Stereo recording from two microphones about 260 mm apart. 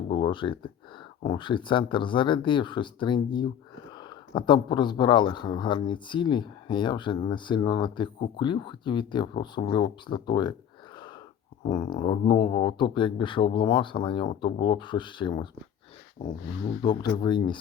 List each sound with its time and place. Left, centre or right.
0.1 s a sound: centre
1.2 s speech: centre
11.7 s speech: centre
16.8 s speech: centre